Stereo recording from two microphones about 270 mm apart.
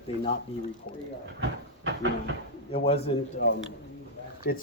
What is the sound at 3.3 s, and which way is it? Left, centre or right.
Speech, left.